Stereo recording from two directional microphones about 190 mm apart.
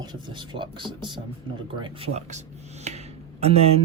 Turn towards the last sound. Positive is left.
turn(degrees=-30)  # may be behind; listen again after turning